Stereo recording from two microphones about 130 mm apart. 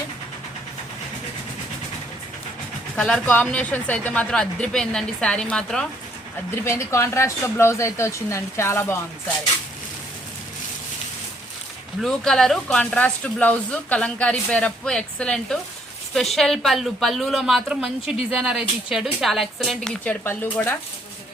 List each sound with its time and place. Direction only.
2.9 s speech: 5° left (ahead or behind)
6.5 s speech: 20° left (ahead or behind)
12.0 s a woman's voice: 5° left (ahead or behind)
20.2 s speech: 15° left (ahead or behind)